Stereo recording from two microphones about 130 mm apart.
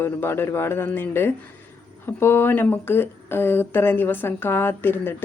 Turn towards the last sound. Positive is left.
turn(degrees=15)  # may be behind; listen again after turning